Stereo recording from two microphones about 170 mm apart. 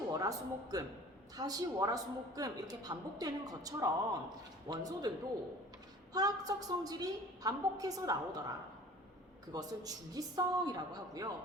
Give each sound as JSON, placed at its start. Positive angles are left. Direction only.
{"t": 0.1, "sound": "a woman's voice", "side_deg": -20}
{"t": 6.1, "sound": "a woman's voice", "side_deg": -20}